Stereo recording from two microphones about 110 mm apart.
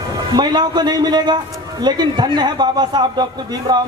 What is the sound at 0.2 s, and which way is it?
A man's voice, 40° right (ahead or behind).